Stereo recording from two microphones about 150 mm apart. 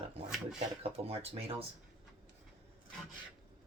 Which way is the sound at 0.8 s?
40° right (ahead or behind).